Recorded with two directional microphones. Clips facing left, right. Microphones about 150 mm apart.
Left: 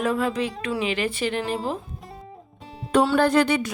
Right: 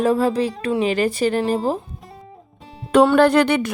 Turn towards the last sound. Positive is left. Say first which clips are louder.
# right 4 dB
turn(degrees=-60)  # may be behind; listen again after turning